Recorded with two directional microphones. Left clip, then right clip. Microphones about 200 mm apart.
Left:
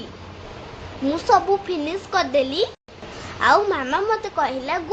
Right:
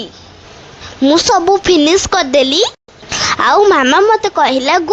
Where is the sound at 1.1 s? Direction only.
45° right (ahead or behind).